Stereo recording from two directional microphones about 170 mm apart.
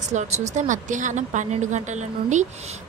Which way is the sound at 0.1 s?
45° right (ahead or behind).